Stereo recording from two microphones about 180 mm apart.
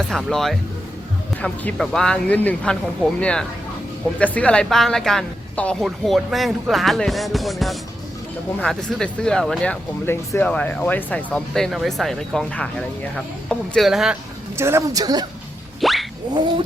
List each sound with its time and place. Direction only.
0.0 s speech: 5° left (ahead or behind)
14.5 s speech: 15° right (ahead or behind)
15.8 s plop: centre (ahead or behind)